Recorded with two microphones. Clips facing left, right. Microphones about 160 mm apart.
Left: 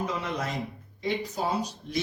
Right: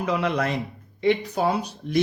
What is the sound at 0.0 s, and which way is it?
Speech, 75° right (ahead or behind).